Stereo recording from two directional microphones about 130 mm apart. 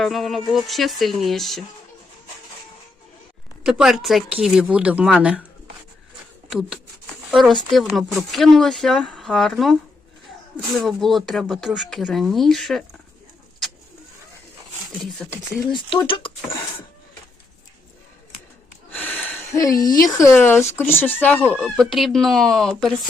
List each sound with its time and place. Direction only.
0.0 s speech: centre (ahead or behind)
3.6 s speech: 5° right (ahead or behind)
6.5 s speech: 5° right (ahead or behind)
15.2 s speech: 5° left (ahead or behind)
16.0 s speech: 45° left (ahead or behind)
18.9 s a sound: 15° left (ahead or behind)
19.5 s speech: 25° left (ahead or behind)
21.6 s speech: centre (ahead or behind)